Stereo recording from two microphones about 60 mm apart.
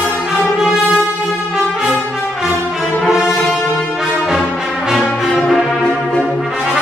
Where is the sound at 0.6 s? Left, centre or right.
Centre.